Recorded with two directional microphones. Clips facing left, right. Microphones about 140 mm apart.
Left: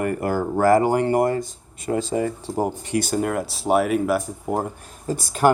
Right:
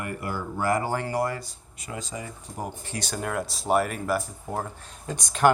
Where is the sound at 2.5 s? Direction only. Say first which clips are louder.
Left 11 dB; 25° left (ahead or behind).